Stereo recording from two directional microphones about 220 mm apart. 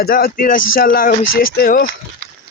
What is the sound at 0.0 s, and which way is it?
Speech, 40° left (ahead or behind).